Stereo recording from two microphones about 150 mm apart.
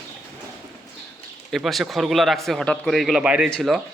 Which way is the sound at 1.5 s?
Centre (ahead or behind).